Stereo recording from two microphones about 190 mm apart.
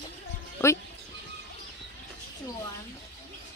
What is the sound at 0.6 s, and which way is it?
Speech, 10° left (ahead or behind).